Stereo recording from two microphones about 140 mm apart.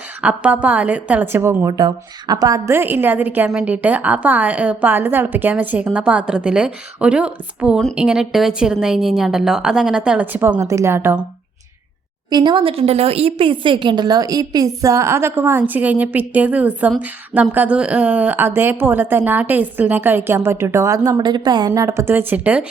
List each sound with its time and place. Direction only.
0.2 s a woman's voice: 10° right (ahead or behind)
12.3 s a woman's voice: 35° right (ahead or behind)
21.7 s a woman's voice: 20° right (ahead or behind)